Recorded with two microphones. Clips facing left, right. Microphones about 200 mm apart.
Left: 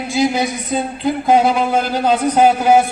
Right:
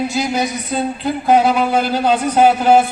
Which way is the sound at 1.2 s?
10° right (ahead or behind).